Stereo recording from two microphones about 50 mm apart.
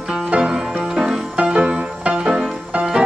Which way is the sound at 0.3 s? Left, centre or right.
Centre.